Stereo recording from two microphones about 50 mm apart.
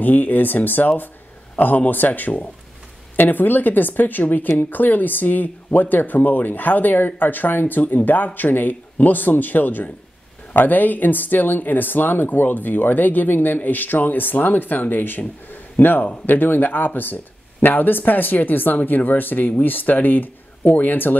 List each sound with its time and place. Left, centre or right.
0.0 s speech: left